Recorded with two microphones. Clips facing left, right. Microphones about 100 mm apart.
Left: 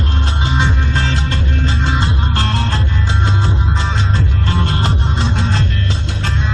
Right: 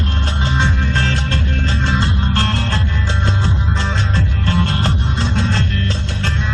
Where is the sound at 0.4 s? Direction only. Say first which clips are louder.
Even; 15° left (ahead or behind).